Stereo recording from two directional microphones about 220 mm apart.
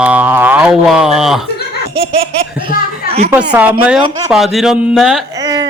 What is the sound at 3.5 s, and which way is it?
A man's voice, 5° right (ahead or behind).